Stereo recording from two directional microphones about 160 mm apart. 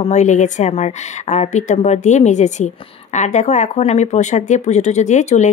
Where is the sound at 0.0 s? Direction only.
45° left (ahead or behind).